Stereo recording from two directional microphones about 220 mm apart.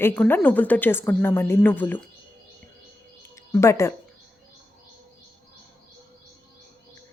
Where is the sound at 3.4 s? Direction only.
10° left (ahead or behind).